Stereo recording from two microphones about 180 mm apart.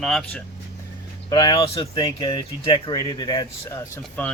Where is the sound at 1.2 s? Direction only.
25° left (ahead or behind).